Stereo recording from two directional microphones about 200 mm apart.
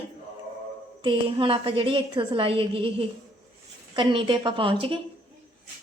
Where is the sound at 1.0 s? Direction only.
25° right (ahead or behind).